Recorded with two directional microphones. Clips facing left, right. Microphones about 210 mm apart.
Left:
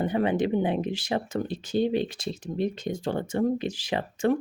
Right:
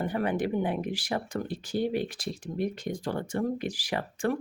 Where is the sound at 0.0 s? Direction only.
20° left (ahead or behind).